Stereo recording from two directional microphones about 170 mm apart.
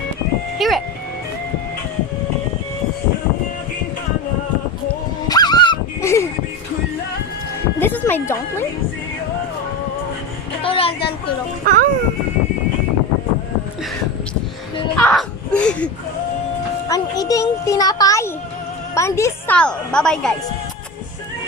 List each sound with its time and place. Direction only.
0.6 s music: centre (ahead or behind)
5.3 s dog: 25° left (ahead or behind)
7.8 s music: 10° left (ahead or behind)
10.6 s a sound: 30° left (ahead or behind)
11.6 s a sound: 55° right (ahead or behind)
14.9 s caw: 10° left (ahead or behind)
16.9 s music: 20° left (ahead or behind)
19.5 s a woman's voice: 5° left (ahead or behind)